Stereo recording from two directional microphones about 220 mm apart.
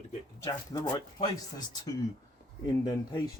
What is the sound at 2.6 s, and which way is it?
Speech, 15° left (ahead or behind).